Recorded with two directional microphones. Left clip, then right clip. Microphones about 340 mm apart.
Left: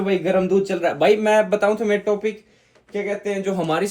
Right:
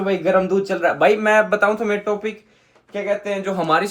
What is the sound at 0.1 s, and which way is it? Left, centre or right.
Speech, centre.